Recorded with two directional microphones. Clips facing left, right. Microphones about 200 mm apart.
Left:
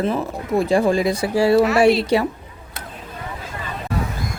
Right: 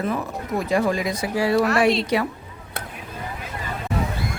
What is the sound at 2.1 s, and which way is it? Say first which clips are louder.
Speech: left 4 dB; 30° left (ahead or behind).